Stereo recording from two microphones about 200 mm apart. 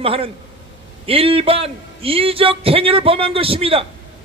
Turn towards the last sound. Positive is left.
turn(degrees=-30)  # may be behind; listen again after turning